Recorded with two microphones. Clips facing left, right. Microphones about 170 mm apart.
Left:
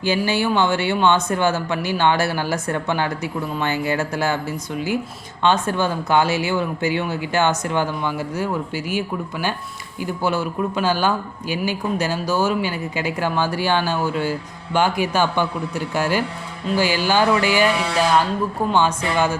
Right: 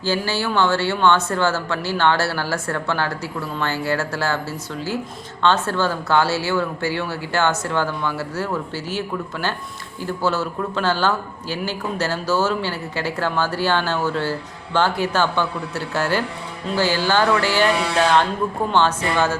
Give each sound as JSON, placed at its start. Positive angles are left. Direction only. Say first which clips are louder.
{"t": 0.0, "sound": "speech", "louder": "left 2 dB", "side_deg": 15}